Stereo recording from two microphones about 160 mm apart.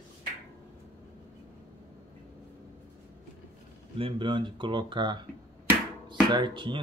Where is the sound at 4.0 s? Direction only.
35° right (ahead or behind).